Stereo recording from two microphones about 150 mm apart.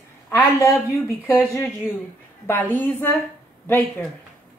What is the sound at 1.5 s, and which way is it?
A woman's voice, 15° left (ahead or behind).